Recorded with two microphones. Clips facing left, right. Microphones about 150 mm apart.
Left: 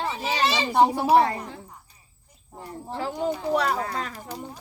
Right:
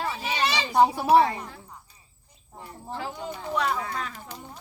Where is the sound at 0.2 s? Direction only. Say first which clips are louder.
Left 3 dB; 35° left (ahead or behind).